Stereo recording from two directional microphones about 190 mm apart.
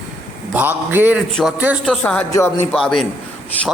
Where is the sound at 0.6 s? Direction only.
10° right (ahead or behind).